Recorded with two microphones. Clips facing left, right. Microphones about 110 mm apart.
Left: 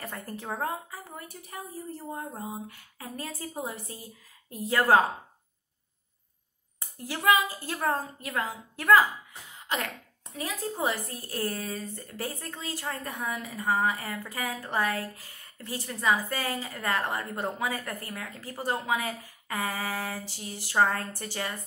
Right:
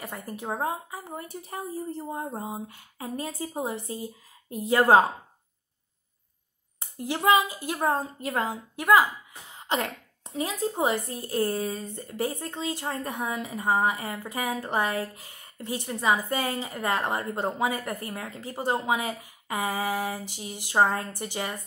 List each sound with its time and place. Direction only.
0.0 s a woman's voice: 10° right (ahead or behind)
6.8 s a woman's voice: 20° right (ahead or behind)